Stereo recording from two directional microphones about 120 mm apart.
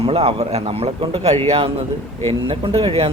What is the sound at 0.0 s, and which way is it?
A man's voice, 55° right (ahead or behind).